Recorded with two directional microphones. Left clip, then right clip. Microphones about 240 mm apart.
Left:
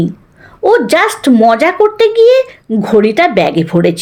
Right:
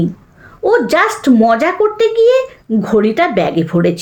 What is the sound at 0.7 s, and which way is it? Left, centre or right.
Speech, left.